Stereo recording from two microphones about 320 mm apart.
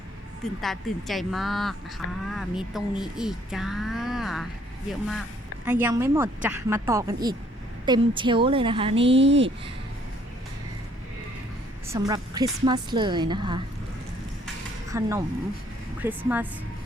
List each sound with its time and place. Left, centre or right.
0.6 s a woman's voice: centre
9.1 s speech: right
11.9 s a woman's voice: centre
14.8 s speech: centre